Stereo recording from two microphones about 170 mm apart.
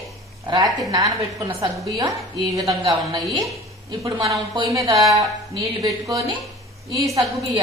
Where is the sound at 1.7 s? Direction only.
Centre (ahead or behind).